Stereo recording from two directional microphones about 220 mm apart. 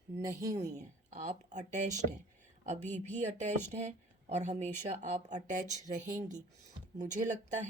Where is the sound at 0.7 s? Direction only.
35° right (ahead or behind).